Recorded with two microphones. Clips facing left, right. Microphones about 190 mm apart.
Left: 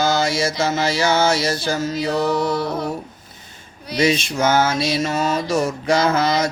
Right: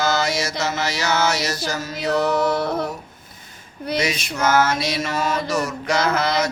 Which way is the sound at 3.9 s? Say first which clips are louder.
Left 6 dB; 30° left (ahead or behind).